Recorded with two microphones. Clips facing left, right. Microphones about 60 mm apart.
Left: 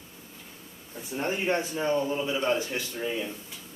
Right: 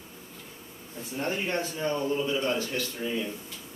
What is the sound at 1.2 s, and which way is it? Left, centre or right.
A man's voice, centre.